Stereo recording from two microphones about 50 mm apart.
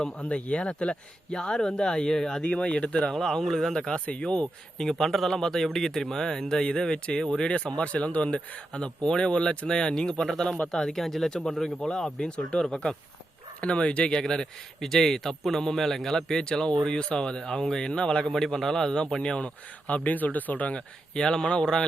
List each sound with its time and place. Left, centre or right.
0.3 s speech: left
2.4 s speech: left
3.1 s speech: centre
13.6 s speech: left
19.9 s speech: left
20.7 s speech: centre